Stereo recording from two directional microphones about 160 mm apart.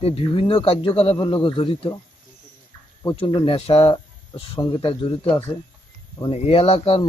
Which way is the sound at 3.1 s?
35° left (ahead or behind).